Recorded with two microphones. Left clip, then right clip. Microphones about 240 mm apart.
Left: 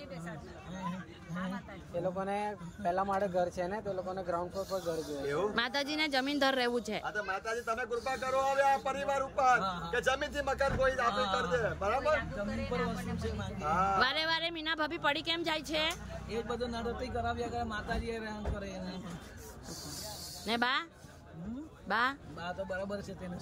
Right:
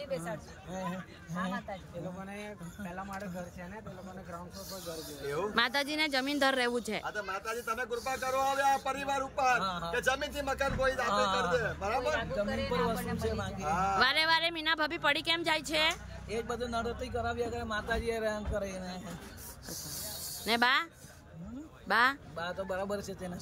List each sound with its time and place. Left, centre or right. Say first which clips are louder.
1.3 s speech: right 4 dB; right
2.2 s speech: left 8 dB; left
5.2 s speech: right 3 dB; centre
9.6 s speech: right 1 dB; centre
9.8 s speech: even; centre
12.2 s speech: right 4 dB; right
13.6 s speech: even; centre
16.3 s speech: right 1 dB; centre
20.4 s speech: right 4 dB; centre
21.8 s speech: right 4 dB; centre